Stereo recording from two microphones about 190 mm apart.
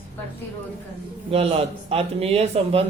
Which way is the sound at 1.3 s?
30° right (ahead or behind).